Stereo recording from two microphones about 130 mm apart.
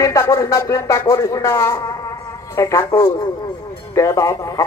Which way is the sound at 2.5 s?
25° left (ahead or behind).